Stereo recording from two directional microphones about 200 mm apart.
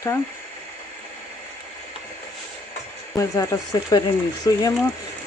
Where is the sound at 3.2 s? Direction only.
15° left (ahead or behind).